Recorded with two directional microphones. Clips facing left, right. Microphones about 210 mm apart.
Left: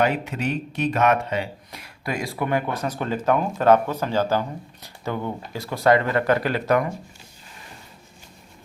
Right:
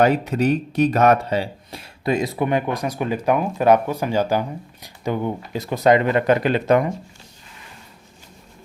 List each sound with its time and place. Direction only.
0.0 s speech: 40° right (ahead or behind); by 6.9 s 20° right (ahead or behind)